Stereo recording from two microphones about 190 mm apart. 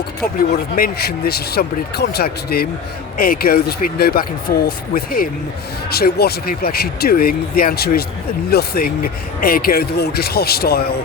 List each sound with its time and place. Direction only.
0.8 s speech: 55° left (ahead or behind)